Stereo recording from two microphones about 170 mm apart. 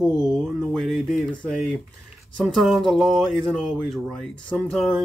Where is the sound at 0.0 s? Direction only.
Centre (ahead or behind).